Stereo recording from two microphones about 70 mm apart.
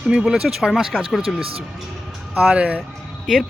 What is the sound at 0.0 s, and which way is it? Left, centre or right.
Speech, centre.